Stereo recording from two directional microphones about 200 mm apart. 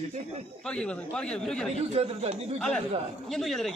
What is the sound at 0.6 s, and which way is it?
Speech, 5° left (ahead or behind).